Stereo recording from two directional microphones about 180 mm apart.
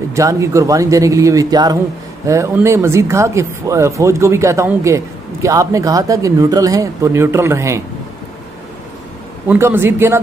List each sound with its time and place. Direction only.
0.1 s speech: 15° right (ahead or behind)
9.5 s speech: 15° right (ahead or behind)